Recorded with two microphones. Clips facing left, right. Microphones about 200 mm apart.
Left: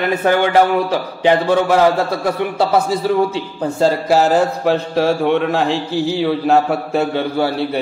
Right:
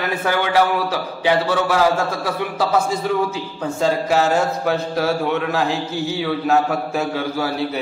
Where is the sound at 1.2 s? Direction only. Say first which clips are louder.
Left 4 dB; 50° left (ahead or behind).